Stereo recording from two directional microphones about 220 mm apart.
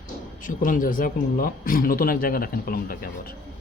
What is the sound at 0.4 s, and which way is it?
Speech, 40° left (ahead or behind).